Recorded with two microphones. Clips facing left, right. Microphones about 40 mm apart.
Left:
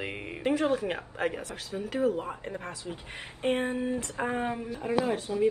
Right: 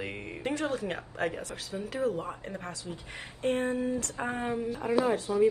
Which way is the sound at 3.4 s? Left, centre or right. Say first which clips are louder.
Left 1 dB; left.